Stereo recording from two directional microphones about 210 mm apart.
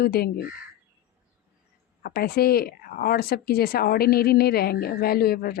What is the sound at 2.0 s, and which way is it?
Speech, 45° left (ahead or behind).